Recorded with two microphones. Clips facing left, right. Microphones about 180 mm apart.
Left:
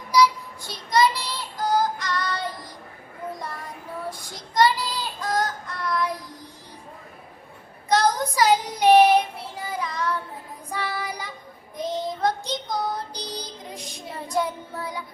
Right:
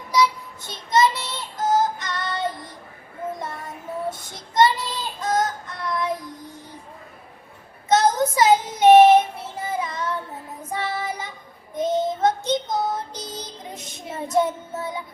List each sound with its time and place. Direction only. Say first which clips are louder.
0.1 s child singing: left 1 dB; 25° right (ahead or behind)
4.1 s child singing: right 1 dB; 25° right (ahead or behind)
7.9 s child singing: right 3 dB; 25° right (ahead or behind)